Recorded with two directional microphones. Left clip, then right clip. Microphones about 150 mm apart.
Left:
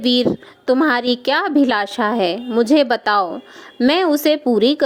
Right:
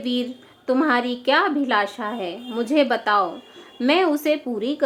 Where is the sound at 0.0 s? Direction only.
60° left (ahead or behind).